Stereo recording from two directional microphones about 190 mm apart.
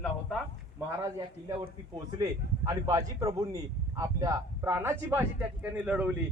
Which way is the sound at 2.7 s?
15° right (ahead or behind).